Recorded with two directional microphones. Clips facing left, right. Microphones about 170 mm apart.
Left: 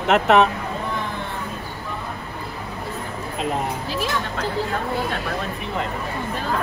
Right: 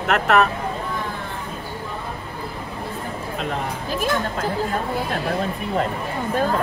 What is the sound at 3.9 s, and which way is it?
Speech, 50° right (ahead or behind).